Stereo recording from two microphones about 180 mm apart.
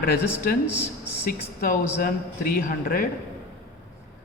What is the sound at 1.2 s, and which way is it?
A man's voice, 50° left (ahead or behind).